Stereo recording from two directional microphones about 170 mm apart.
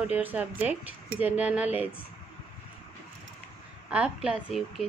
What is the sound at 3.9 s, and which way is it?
Speech, 5° right (ahead or behind).